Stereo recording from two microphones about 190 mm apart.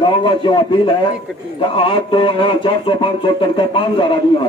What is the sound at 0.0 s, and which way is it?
Speech, 25° left (ahead or behind).